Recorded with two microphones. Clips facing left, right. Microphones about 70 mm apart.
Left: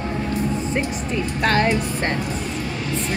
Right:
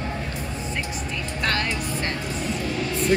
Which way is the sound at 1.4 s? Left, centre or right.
Left.